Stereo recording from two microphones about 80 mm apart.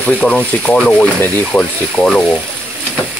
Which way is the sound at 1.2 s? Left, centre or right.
Left.